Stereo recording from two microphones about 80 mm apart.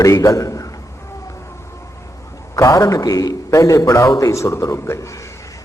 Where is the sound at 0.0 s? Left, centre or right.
Left.